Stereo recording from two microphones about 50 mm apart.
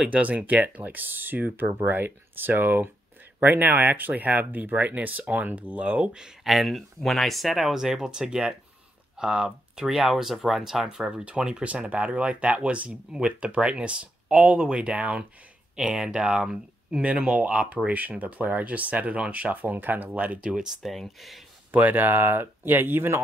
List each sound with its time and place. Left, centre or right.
0.0 s speech: right
6.4 s speech: centre
9.8 s speech: centre; by 15.2 s right
15.7 s speech: centre; by 20.1 s right
20.3 s speech: right
20.8 s speech: centre
21.7 s speech: right